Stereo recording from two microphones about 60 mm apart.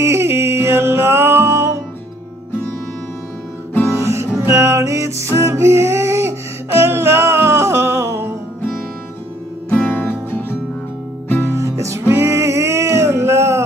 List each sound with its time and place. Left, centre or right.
0.0 s music: right
3.9 s music: right
9.7 s music: left
11.4 s music: right